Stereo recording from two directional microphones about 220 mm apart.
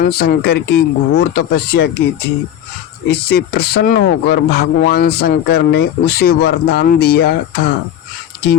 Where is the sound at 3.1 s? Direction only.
45° left (ahead or behind).